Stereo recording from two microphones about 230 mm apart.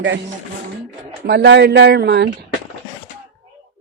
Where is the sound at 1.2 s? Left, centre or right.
Right.